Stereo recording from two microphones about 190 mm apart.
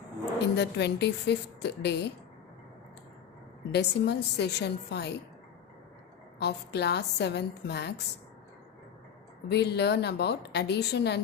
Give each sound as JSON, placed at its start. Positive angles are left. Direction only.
{"t": 0.3, "sound": "a woman's voice", "side_deg": 65}
{"t": 3.7, "sound": "a woman's voice", "side_deg": 60}
{"t": 6.4, "sound": "a woman's voice", "side_deg": 60}
{"t": 9.5, "sound": "a woman's voice", "side_deg": 60}